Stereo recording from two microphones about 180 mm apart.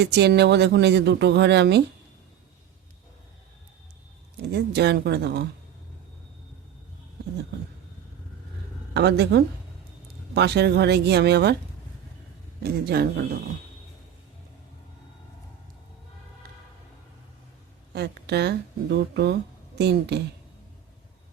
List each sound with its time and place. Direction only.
0.0 s speech: 70° right (ahead or behind)
4.4 s speech: 65° right (ahead or behind)
8.9 s speech: 70° right (ahead or behind)
12.6 s speech: 60° right (ahead or behind)
17.9 s speech: 65° right (ahead or behind)